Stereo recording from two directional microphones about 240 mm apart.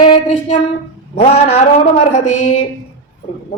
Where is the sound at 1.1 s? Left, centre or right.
Left.